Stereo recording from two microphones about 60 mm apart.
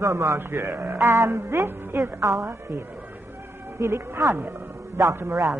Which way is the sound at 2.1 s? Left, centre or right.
Right.